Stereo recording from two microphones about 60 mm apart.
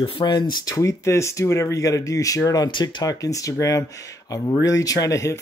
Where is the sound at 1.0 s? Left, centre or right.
Left.